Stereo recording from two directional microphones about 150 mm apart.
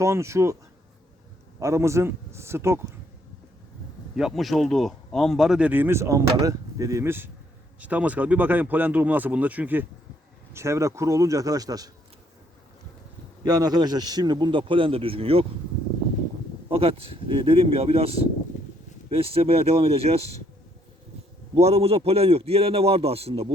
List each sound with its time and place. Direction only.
0.0 s a man's voice: 20° right (ahead or behind)
1.5 s speech: 20° right (ahead or behind)
4.1 s a man's voice: centre (ahead or behind); by 11.9 s 25° right (ahead or behind)
13.4 s a man's voice: 25° right (ahead or behind)
16.6 s a man's voice: 40° right (ahead or behind)
19.1 s a man's voice: 40° right (ahead or behind)
21.6 s a man's voice: 40° right (ahead or behind)